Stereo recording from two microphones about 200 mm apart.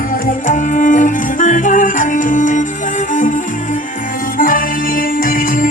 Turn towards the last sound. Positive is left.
turn(degrees=45)  # may be behind; listen again after turning